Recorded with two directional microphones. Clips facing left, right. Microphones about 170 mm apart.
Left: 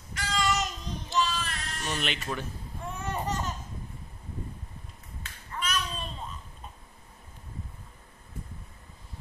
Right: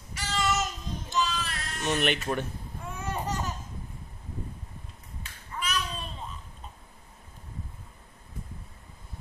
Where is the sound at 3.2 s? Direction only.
10° right (ahead or behind).